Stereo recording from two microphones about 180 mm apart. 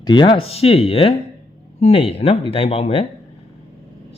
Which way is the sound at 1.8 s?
30° left (ahead or behind).